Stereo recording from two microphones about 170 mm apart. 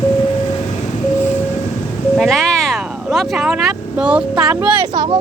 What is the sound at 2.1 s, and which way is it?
Vehicle, centre (ahead or behind).